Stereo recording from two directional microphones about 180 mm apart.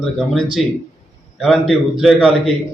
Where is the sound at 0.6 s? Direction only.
Centre (ahead or behind).